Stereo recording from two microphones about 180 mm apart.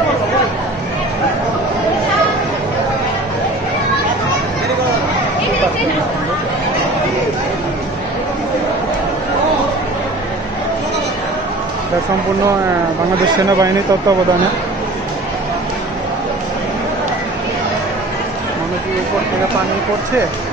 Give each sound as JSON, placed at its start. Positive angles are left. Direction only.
{"t": 13.5, "sound": "speech", "side_deg": -20}